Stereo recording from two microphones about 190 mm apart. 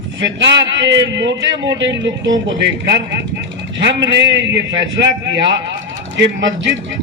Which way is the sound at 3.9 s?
70° right (ahead or behind).